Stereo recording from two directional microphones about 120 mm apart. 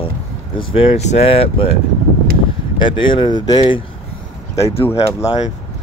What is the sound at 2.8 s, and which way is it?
Speech, 45° left (ahead or behind).